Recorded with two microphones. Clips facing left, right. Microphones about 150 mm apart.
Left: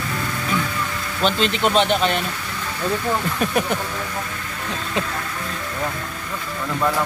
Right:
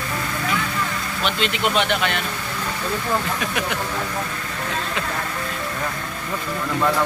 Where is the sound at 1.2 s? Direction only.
35° left (ahead or behind).